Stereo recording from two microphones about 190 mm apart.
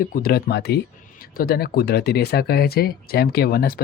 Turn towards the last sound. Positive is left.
turn(degrees=55)  # may be behind; listen again after turning